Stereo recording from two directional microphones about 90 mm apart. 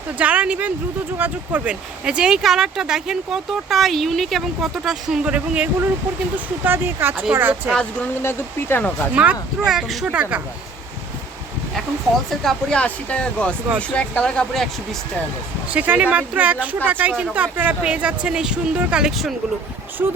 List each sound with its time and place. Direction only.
0.2 s speech: 15° right (ahead or behind)
8.2 s speech: 25° left (ahead or behind)
9.1 s speech: 15° right (ahead or behind)
9.6 s speech: 5° right (ahead or behind)
10.1 s speech: 15° right (ahead or behind)
12.3 s speech: 5° left (ahead or behind)
15.7 s speech: 15° right (ahead or behind)
20.0 s speech: 20° right (ahead or behind)